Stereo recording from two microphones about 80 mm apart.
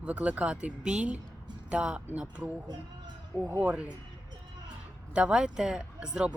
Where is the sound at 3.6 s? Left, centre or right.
Centre.